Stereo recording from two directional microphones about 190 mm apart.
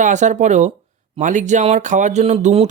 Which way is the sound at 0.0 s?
40° right (ahead or behind).